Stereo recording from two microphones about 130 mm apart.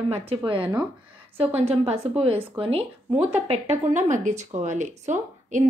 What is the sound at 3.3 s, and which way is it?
Speech, 55° right (ahead or behind).